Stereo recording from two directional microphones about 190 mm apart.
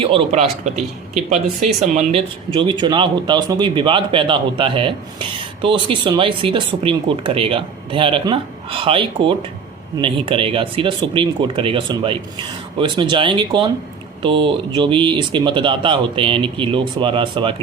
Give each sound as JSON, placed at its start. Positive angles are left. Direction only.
{"t": 0.0, "sound": "a man's voice", "side_deg": -30}